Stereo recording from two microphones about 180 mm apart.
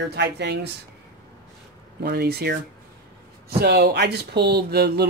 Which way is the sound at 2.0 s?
60° right (ahead or behind).